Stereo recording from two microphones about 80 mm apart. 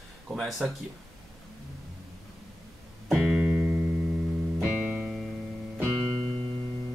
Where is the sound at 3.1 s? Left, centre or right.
Centre.